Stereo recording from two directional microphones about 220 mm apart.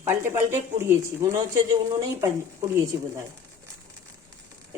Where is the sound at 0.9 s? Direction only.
15° right (ahead or behind).